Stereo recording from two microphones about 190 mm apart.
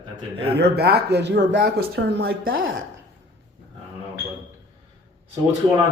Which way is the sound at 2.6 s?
90° right.